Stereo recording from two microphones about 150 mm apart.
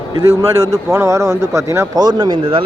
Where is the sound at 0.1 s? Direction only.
20° right (ahead or behind).